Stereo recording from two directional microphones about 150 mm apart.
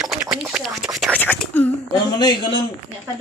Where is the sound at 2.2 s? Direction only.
30° left (ahead or behind).